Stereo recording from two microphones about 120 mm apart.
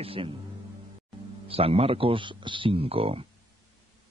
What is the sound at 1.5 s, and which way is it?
Speech, 55° right (ahead or behind).